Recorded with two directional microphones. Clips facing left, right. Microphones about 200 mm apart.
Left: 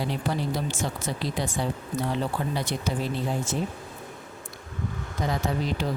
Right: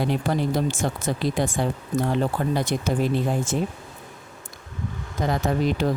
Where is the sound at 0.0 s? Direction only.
55° right (ahead or behind).